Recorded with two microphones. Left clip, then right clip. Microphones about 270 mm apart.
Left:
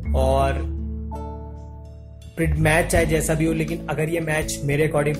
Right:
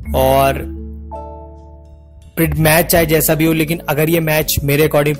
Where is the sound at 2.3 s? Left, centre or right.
Right.